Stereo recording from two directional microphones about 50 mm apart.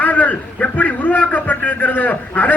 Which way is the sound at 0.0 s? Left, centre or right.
Left.